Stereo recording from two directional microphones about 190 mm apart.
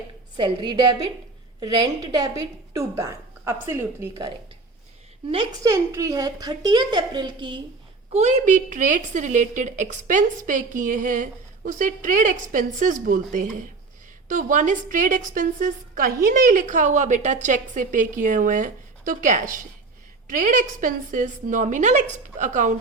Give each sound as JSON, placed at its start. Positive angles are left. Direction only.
{"t": 0.3, "sound": "a woman's voice", "side_deg": -25}
{"t": 5.3, "sound": "a woman's voice", "side_deg": -25}
{"t": 8.1, "sound": "a woman's voice", "side_deg": -35}
{"t": 14.3, "sound": "a woman's voice", "side_deg": -45}